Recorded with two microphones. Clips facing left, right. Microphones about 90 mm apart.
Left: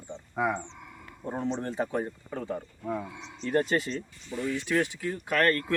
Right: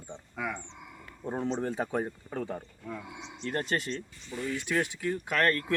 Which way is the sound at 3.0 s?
15° right (ahead or behind).